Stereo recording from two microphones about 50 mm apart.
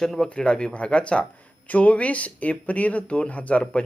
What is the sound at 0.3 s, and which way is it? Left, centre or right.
Speech, centre.